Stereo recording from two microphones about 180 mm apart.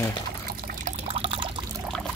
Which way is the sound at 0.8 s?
35° right (ahead or behind).